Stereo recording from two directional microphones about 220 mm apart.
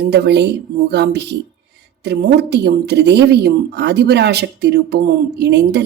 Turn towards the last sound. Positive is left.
turn(degrees=-50)  # may be behind; listen again after turning